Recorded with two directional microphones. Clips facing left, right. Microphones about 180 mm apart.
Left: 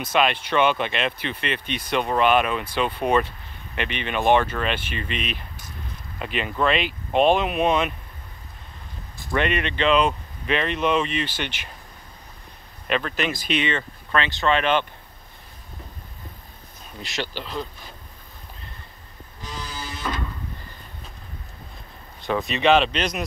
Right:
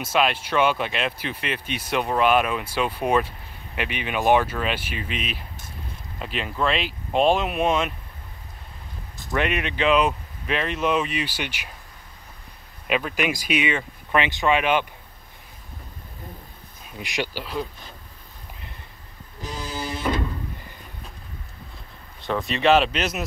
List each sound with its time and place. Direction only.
0.0 s speech: 5° right (ahead or behind)
9.3 s speech: 5° right (ahead or behind)
12.8 s speech: 10° right (ahead or behind)
17.0 s speech: 15° right (ahead or behind)
19.7 s a sound: 25° right (ahead or behind)
22.2 s speech: centre (ahead or behind)